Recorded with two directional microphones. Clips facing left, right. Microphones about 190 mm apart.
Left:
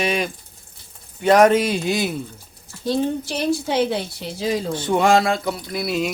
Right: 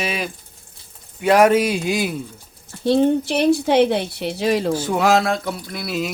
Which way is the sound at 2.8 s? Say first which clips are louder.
Right 6 dB; 65° right (ahead or behind).